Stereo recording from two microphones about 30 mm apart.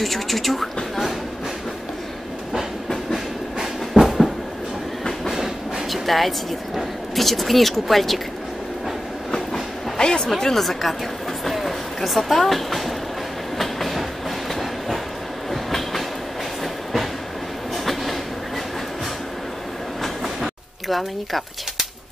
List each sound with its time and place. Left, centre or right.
0.0 s speech: centre
3.9 s train: centre
5.9 s speech: centre
9.3 s train: left
10.4 s speech: centre
11.4 s a sound: centre
12.3 s speech: centre
13.6 s train: centre
20.9 s speech: centre